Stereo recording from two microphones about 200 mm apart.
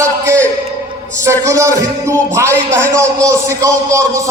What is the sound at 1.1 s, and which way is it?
Speech, 15° right (ahead or behind).